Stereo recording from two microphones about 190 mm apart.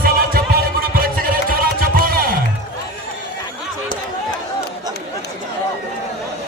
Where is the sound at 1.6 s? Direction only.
50° right (ahead or behind).